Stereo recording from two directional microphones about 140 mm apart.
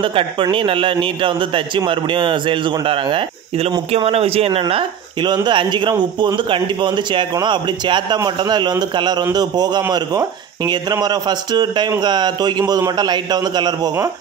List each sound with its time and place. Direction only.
0.0 s a man's voice: 35° right (ahead or behind)